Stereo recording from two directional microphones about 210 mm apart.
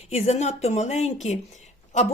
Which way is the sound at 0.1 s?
30° left (ahead or behind).